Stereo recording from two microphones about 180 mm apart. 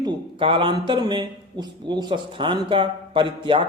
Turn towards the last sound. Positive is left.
turn(degrees=-25)  # may be behind; listen again after turning